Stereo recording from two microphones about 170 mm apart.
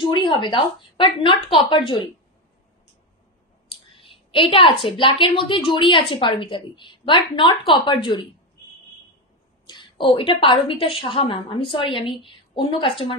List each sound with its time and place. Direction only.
0.0 s a woman's voice: 30° left (ahead or behind)
3.6 s a woman's voice: 30° left (ahead or behind)
9.7 s a woman's voice: 30° left (ahead or behind)